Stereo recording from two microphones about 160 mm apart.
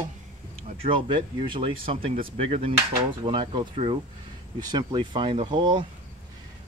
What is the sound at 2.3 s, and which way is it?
Speech, 35° right (ahead or behind).